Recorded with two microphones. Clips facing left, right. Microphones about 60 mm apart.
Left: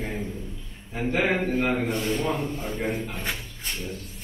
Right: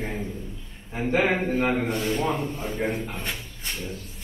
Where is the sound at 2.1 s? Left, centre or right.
Centre.